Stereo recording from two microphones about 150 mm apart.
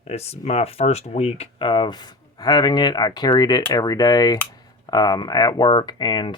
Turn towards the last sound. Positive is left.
turn(degrees=30)  # may be behind; listen again after turning